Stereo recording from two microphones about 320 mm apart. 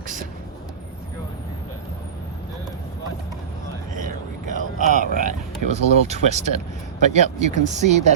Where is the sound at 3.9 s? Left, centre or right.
Right.